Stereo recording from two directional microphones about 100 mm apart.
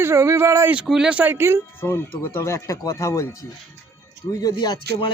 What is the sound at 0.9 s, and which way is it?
Speech, 5° right (ahead or behind).